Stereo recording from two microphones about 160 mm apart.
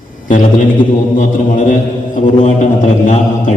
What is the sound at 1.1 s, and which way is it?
Mantra, 55° left (ahead or behind).